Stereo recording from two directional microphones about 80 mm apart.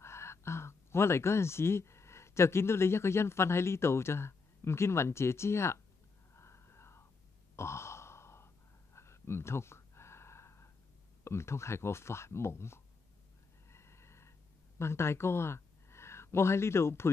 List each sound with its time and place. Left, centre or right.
0.0 s speech: left
6.3 s whispering: left
7.5 s sigh: left
8.9 s gasp: left
11.2 s speech: left
13.7 s snort: left
14.8 s speech: left